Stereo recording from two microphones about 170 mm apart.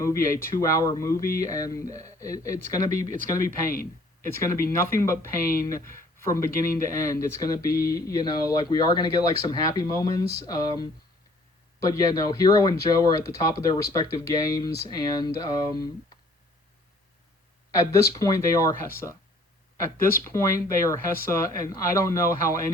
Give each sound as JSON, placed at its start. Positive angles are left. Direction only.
{"t": 0.0, "sound": "speech", "side_deg": 15}
{"t": 2.7, "sound": "speech", "side_deg": -45}
{"t": 4.2, "sound": "speech", "side_deg": 15}
{"t": 17.7, "sound": "speech", "side_deg": 20}